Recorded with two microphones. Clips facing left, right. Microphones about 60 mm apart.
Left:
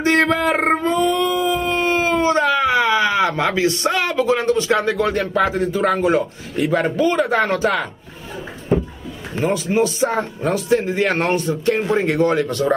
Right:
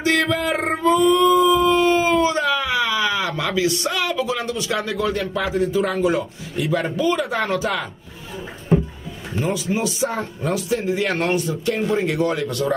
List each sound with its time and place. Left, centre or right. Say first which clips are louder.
0.0 s male singing: left 3 dB; left
1.1 s howl: right 4 dB; left
7.0 s speech: left 5 dB; left
9.4 s speech: left 5 dB; left